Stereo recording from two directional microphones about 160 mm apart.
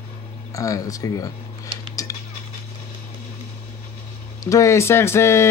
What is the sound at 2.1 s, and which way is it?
Dishes, 20° left (ahead or behind).